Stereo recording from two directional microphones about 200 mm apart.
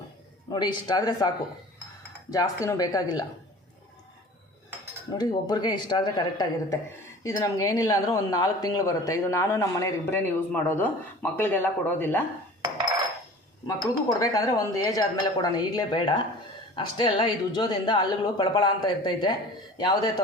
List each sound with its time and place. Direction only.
0.5 s speech: 20° left (ahead or behind)
2.3 s speech: 15° left (ahead or behind)
5.1 s speech: 20° left (ahead or behind)
13.7 s speech: 15° left (ahead or behind)